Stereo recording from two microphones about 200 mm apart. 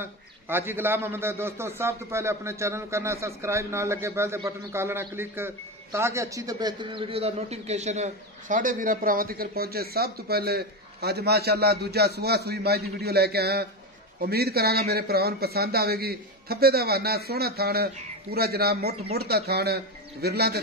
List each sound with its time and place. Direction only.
0.0 s a man's voice: 10° right (ahead or behind); by 20.5 s 55° right (ahead or behind)